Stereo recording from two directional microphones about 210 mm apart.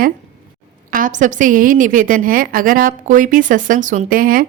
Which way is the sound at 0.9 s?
40° right (ahead or behind).